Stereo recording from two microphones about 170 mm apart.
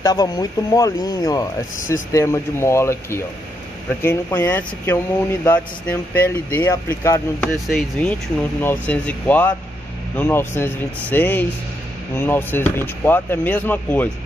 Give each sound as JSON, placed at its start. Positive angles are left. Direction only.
{"t": 0.0, "sound": "speech", "side_deg": 20}
{"t": 7.5, "sound": "speech", "side_deg": 0}